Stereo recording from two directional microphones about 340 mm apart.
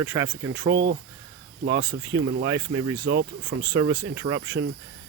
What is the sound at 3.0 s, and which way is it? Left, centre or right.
Speech, right.